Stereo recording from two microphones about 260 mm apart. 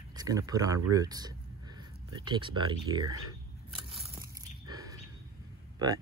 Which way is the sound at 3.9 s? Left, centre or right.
Centre.